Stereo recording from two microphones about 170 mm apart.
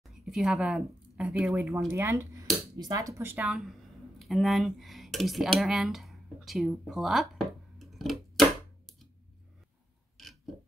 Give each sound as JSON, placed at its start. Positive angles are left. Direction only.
{"t": 0.0, "sound": "speech", "side_deg": 0}
{"t": 6.8, "sound": "a sound", "side_deg": 0}
{"t": 10.1, "sound": "mechanisms", "side_deg": 0}